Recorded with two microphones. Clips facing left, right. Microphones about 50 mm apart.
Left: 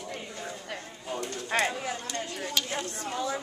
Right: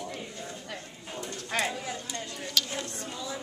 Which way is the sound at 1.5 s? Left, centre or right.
Left.